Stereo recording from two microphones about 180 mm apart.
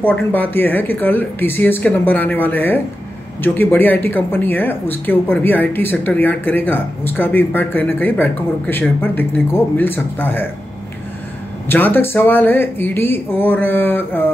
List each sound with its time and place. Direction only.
0.0 s speech: 10° left (ahead or behind)
11.7 s speech: 10° left (ahead or behind)